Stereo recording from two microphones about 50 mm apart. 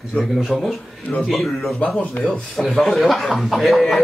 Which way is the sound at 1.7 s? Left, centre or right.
Left.